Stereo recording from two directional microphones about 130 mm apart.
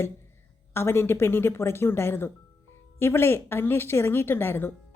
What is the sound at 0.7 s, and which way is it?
A woman's voice, 20° left (ahead or behind).